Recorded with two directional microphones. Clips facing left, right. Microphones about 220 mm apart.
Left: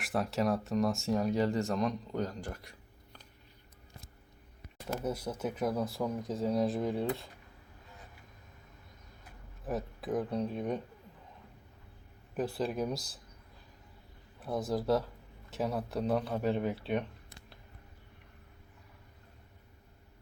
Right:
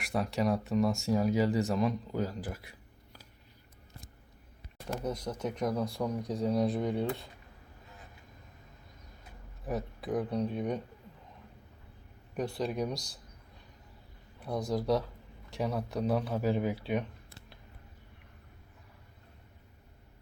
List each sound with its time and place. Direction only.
0.0 s speech: centre (ahead or behind)
5.0 s speech: 5° left (ahead or behind)
9.6 s speech: centre (ahead or behind)
12.4 s speech: centre (ahead or behind)
14.3 s speech: centre (ahead or behind)